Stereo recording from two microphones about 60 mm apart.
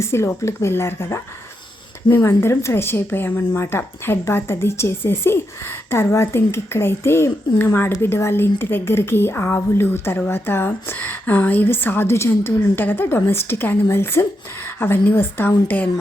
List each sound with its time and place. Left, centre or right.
0.0 s a woman's voice: left
10.9 s a woman's voice: left
12.1 s a woman's voice: left